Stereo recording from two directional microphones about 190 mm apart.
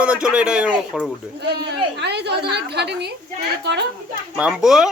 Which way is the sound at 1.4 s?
60° right (ahead or behind).